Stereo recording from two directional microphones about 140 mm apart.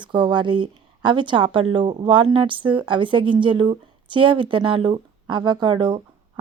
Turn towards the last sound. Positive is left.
turn(degrees=-30)  # may be behind; listen again after turning